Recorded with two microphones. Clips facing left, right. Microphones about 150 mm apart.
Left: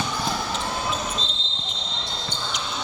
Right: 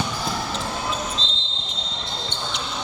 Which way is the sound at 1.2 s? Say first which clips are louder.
Even; 90° right.